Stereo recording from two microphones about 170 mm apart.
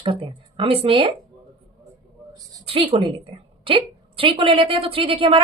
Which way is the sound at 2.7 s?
30° right (ahead or behind).